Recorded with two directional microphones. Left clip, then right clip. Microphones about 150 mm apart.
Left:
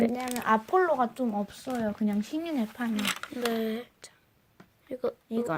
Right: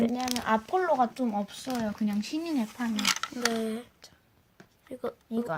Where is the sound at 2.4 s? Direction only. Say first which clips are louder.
Even; 40° left (ahead or behind).